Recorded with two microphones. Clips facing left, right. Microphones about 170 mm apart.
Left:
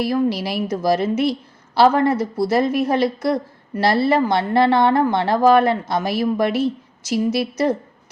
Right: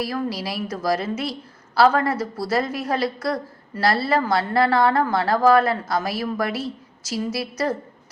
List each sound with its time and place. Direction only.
0.0 s a woman's voice: 25° left (ahead or behind)